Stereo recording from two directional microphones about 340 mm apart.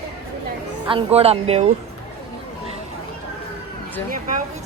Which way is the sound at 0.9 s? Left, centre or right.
Centre.